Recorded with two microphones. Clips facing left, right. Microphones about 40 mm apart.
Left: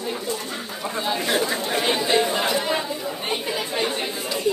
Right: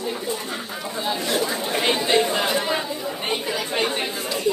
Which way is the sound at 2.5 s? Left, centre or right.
Centre.